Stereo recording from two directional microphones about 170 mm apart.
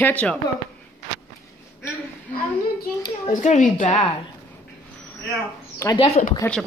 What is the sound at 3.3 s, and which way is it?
Speech, 50° left (ahead or behind).